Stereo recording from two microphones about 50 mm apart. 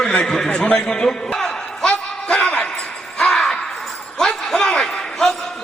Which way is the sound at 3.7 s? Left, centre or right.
Centre.